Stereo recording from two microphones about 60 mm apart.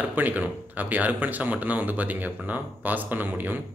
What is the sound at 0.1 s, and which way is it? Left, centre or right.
Speech, right.